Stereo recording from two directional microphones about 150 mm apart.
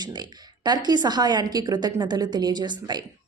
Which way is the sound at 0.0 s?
25° right (ahead or behind).